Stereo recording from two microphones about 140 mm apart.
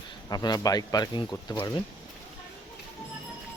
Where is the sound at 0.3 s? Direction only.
25° left (ahead or behind).